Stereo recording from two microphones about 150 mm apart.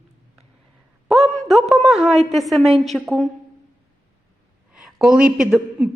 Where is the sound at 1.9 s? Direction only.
Centre (ahead or behind).